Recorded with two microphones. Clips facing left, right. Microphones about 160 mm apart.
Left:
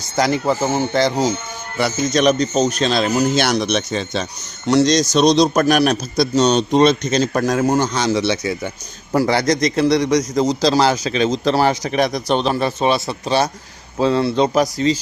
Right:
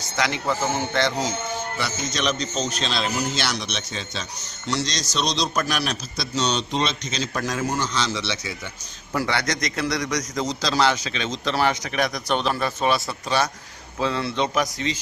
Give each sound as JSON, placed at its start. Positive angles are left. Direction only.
{"t": 0.2, "sound": "a man's voice", "side_deg": 40}
{"t": 1.8, "sound": "a man's voice", "side_deg": 50}